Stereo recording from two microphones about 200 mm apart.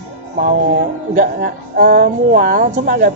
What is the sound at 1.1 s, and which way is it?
Speech, 45° right (ahead or behind).